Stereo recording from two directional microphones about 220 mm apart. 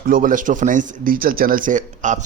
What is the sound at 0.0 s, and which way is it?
Speech, 40° right (ahead or behind).